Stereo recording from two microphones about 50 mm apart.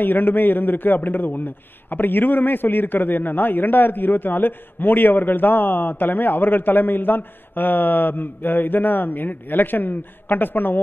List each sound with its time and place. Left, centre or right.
0.0 s a man's voice: left